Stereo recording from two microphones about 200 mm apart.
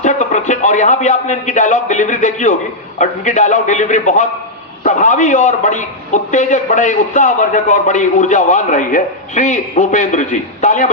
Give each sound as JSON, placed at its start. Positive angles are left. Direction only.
{"t": 0.0, "sound": "a man's voice", "side_deg": 40}